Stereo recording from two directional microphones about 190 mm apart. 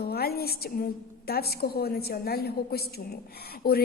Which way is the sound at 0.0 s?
55° left (ahead or behind).